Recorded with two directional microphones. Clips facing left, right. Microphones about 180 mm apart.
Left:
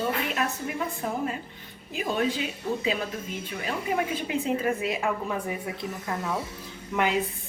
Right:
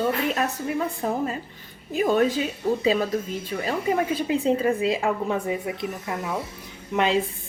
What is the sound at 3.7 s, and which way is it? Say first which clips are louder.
A woman's voice: right 4 dB; 35° right (ahead or behind).